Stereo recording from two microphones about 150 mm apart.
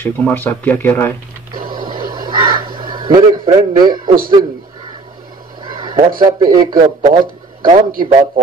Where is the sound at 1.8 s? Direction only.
30° right (ahead or behind).